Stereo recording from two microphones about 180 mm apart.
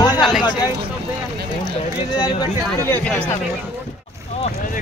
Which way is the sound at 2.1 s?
25° left (ahead or behind).